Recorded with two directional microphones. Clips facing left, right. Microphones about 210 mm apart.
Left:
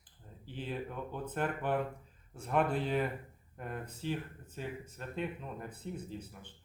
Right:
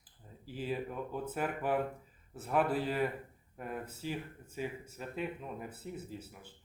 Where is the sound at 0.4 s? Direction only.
5° right (ahead or behind).